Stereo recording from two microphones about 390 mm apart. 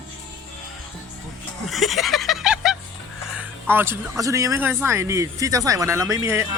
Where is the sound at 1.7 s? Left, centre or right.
Centre.